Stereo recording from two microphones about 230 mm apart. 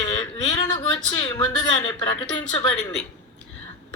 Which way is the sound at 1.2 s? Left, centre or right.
Centre.